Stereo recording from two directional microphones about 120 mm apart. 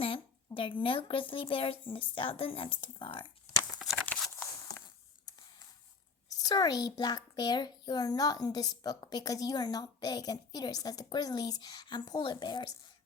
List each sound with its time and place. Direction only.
0.0 s a woman's voice: 45° left (ahead or behind)
3.8 s tearing: 5° right (ahead or behind)
6.2 s a child's voice: 35° left (ahead or behind)